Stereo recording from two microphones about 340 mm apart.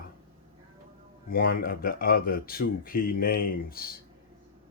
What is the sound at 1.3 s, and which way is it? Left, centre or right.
Speech, left.